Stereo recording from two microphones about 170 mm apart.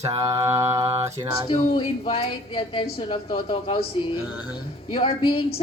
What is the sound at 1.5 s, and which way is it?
A woman's voice, 30° left (ahead or behind).